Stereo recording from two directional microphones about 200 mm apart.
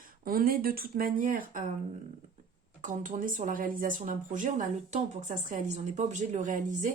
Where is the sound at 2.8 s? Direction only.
40° right (ahead or behind).